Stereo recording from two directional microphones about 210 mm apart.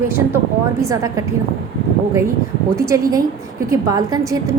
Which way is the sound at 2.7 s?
15° right (ahead or behind).